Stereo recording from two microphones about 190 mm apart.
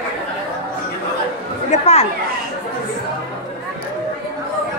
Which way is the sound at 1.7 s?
35° left (ahead or behind).